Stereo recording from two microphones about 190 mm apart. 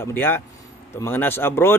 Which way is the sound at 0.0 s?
10° left (ahead or behind).